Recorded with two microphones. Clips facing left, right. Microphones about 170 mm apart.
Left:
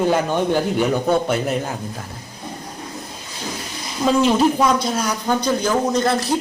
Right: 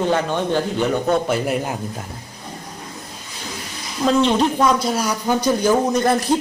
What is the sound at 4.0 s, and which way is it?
Speech, 5° left (ahead or behind).